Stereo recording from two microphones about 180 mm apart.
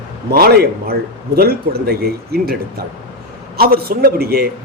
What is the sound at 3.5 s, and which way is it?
Speech, 55° right (ahead or behind).